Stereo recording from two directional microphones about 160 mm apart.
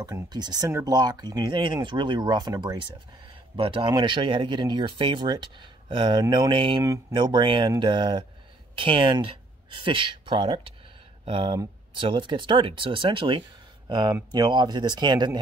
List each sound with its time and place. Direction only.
0.0 s speech: 25° right (ahead or behind)